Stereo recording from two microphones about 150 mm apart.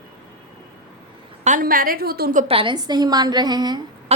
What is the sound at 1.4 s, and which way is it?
A woman's voice, 65° right (ahead or behind).